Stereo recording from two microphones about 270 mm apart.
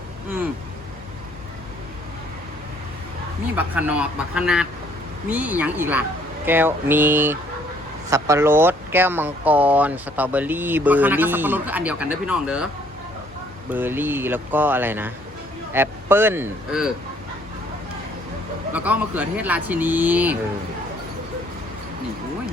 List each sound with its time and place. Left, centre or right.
3.5 s speech: centre
13.7 s speech: centre
18.7 s speech: centre